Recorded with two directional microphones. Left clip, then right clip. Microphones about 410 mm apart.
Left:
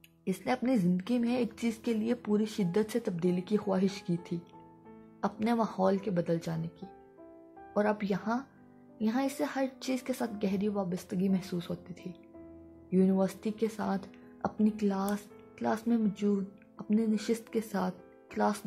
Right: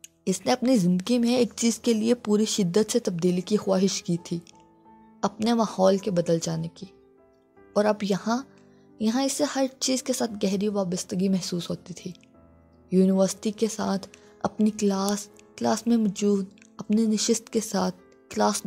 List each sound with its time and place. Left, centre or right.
0.2 s speech: centre
7.7 s speech: centre